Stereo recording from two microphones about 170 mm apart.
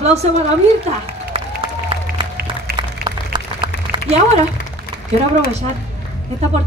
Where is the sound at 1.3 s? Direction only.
35° right (ahead or behind).